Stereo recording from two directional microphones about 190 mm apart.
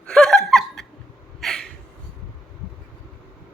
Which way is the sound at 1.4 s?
Centre (ahead or behind).